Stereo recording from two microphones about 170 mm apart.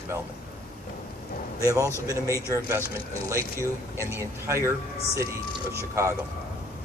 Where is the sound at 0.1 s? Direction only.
15° right (ahead or behind).